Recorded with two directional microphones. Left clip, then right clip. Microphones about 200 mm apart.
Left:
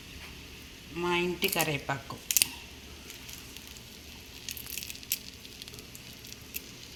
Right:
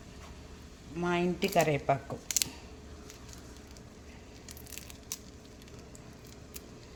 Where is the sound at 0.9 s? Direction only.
55° right (ahead or behind).